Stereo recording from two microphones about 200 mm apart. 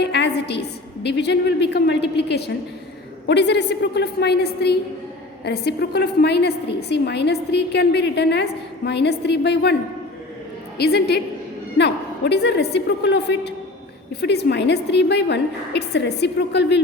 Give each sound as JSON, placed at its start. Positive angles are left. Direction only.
{"t": 0.0, "sound": "a sound", "side_deg": 55}
{"t": 1.0, "sound": "a woman's voice", "side_deg": 55}
{"t": 10.8, "sound": "a woman's voice", "side_deg": 55}